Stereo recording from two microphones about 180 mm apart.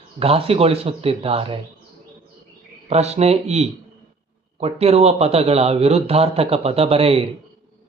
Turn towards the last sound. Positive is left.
turn(degrees=-35)  # may be behind; listen again after turning